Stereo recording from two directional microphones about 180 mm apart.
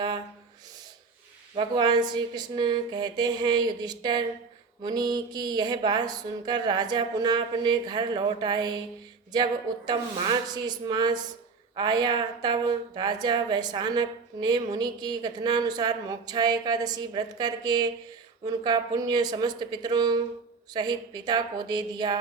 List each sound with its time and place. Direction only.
1.5 s a woman's voice: 25° right (ahead or behind)